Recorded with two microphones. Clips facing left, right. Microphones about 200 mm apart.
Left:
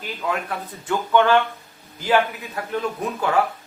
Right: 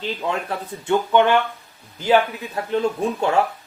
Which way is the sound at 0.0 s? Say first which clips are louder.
Right 2 dB; 25° right (ahead or behind).